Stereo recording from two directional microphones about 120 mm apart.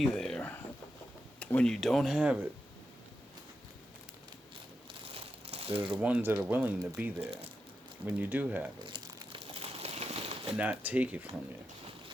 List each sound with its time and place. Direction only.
0.1 s a sound: 5° left (ahead or behind)
1.4 s speech: 10° left (ahead or behind)
2.1 s speech: 10° right (ahead or behind)
5.0 s crumpling: 55° right (ahead or behind)
5.9 s speech: 10° right (ahead or behind)
8.9 s crumpling: 40° right (ahead or behind)
9.5 s a sound: 60° right (ahead or behind)
10.6 s speech: 10° right (ahead or behind)